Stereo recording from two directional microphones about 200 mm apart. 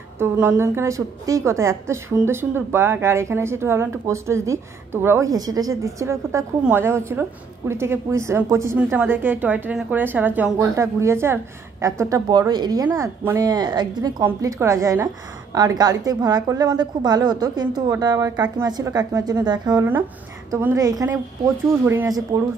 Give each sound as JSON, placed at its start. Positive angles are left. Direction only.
{"t": 0.2, "sound": "a woman's voice", "side_deg": -10}